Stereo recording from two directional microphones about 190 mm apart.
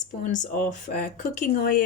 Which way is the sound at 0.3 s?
45° left (ahead or behind).